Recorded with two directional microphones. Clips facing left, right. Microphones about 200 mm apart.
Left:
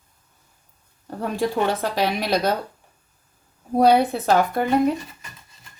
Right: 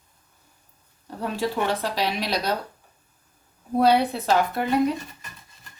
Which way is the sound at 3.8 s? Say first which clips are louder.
Left 3 dB; 45° left (ahead or behind).